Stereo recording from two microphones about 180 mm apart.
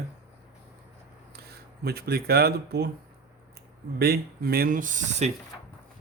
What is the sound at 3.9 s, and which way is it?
Speech, 60° right (ahead or behind).